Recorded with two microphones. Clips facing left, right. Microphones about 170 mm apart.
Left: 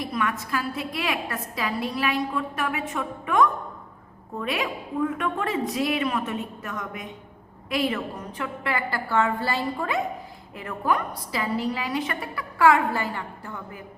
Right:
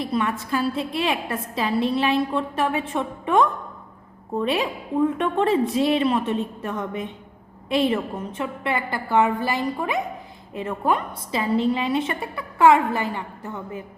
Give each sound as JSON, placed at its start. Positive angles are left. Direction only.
{"t": 0.0, "sound": "a woman's voice", "side_deg": -30}